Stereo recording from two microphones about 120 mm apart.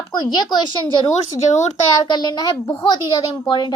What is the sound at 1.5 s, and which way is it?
Speech, 75° left (ahead or behind).